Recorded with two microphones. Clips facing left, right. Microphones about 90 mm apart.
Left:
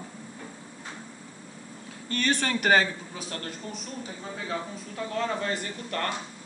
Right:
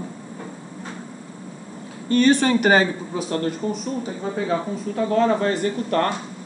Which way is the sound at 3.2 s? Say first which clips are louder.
Right 13 dB; 30° right (ahead or behind).